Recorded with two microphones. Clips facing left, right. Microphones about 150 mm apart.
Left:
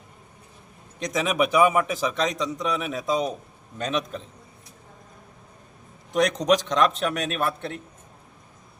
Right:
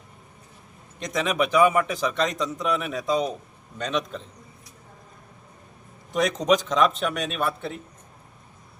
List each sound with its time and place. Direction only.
0.9 s a man's voice: centre (ahead or behind)
6.1 s a man's voice: centre (ahead or behind)